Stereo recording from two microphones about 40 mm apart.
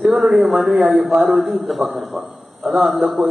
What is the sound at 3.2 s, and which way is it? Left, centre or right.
Speech, right.